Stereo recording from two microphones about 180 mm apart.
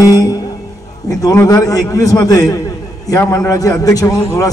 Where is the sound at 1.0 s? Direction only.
20° left (ahead or behind).